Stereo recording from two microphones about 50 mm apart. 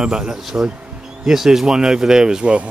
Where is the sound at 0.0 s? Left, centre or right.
Centre.